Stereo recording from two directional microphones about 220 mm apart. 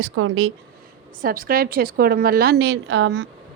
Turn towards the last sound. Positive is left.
turn(degrees=-55)  # may be behind; listen again after turning